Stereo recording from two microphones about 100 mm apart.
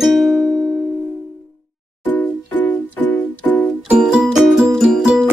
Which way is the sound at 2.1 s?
20° left (ahead or behind).